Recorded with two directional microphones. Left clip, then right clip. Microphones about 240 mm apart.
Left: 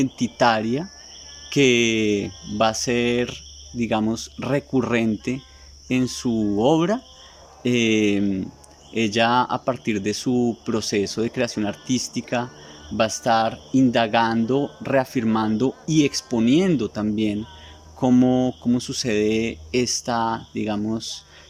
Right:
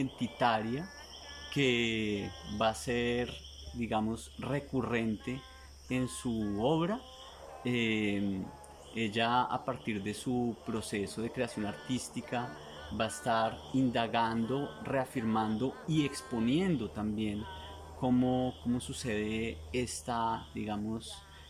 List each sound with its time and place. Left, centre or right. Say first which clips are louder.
0.0 s speech: left 12 dB; left